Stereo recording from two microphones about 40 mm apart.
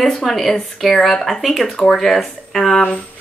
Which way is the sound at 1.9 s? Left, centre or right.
Centre.